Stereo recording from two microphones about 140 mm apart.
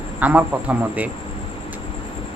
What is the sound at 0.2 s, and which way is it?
Speech, 10° right (ahead or behind).